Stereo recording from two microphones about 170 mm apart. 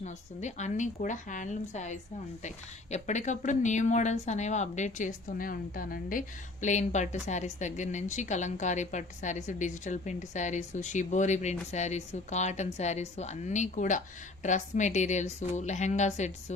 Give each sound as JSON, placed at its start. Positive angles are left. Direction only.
{"t": 0.0, "sound": "a woman's voice", "side_deg": 45}